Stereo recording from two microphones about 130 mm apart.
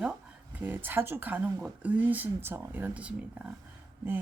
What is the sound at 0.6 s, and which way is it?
Speech, 15° right (ahead or behind).